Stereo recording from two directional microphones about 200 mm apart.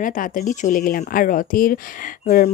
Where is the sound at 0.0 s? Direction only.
40° left (ahead or behind).